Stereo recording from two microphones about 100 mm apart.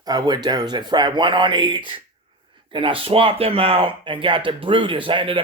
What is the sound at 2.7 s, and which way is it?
Speech, 65° right (ahead or behind).